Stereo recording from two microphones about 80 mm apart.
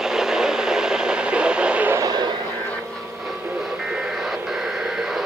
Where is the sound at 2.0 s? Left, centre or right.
Right.